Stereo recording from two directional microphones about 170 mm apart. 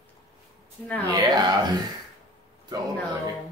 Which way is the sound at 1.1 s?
25° right (ahead or behind).